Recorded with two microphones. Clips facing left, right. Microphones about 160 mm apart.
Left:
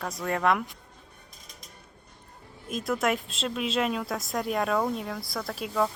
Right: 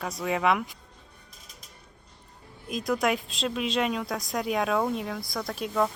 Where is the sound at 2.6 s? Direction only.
Centre (ahead or behind).